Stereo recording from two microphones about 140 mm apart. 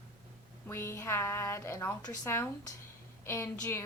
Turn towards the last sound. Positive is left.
turn(degrees=15)  # may be behind; listen again after turning